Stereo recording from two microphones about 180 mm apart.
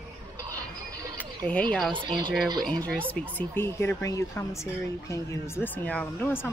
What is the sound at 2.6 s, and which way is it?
Speech, 5° left (ahead or behind).